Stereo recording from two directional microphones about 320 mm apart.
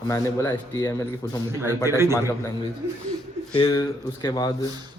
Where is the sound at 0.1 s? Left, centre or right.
Centre.